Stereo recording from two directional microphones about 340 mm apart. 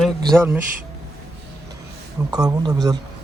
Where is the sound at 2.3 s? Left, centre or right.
Centre.